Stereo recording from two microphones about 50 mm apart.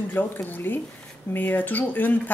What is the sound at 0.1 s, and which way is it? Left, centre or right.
A woman's voice, left.